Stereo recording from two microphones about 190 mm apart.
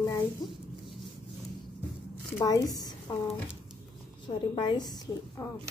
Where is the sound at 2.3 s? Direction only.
20° left (ahead or behind).